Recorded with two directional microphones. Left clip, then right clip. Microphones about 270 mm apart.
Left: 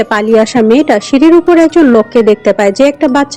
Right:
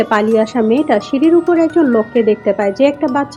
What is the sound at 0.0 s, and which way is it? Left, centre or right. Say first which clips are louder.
Speech: left 4 dB; left.